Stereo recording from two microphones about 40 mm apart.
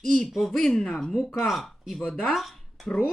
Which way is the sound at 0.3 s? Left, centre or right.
Centre.